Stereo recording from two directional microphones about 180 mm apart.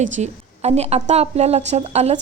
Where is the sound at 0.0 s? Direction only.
40° right (ahead or behind).